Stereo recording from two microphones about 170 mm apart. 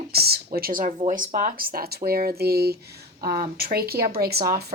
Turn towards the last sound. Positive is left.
turn(degrees=-65)  # may be behind; listen again after turning